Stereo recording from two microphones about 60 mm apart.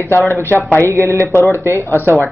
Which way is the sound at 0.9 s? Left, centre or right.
Right.